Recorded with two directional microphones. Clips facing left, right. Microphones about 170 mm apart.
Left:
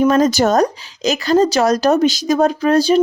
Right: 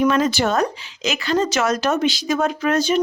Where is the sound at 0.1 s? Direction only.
40° left (ahead or behind).